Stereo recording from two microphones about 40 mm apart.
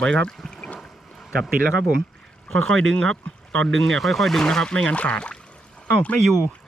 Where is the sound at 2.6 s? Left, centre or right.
Centre.